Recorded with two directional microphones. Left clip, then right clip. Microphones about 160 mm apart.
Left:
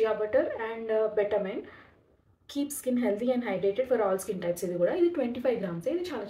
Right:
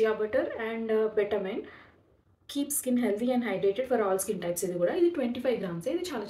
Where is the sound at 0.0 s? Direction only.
10° right (ahead or behind).